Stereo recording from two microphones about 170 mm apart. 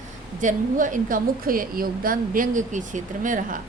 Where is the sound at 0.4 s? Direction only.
50° right (ahead or behind).